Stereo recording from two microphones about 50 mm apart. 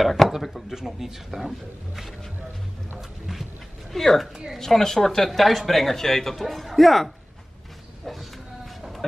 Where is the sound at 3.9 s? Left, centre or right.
Centre.